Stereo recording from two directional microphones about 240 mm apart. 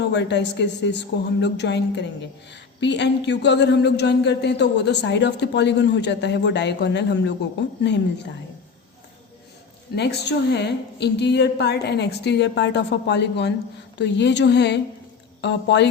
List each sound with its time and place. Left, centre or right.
0.1 s speech: left
9.9 s speech: left